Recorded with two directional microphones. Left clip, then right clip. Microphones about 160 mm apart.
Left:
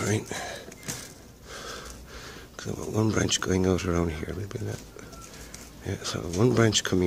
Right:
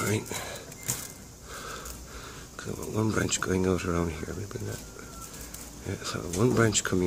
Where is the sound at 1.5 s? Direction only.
35° left (ahead or behind).